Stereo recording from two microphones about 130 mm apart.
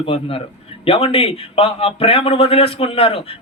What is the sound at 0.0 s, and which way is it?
A man's voice, 45° left (ahead or behind).